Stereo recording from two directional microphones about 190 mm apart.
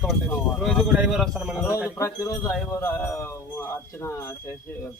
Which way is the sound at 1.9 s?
15° left (ahead or behind).